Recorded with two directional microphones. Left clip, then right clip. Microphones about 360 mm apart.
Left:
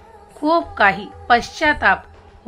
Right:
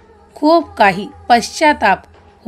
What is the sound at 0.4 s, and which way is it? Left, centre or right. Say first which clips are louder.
A woman's voice: right 5 dB; right.